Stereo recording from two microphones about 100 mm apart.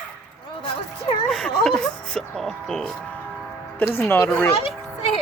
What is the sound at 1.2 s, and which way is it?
Speech, 5° left (ahead or behind).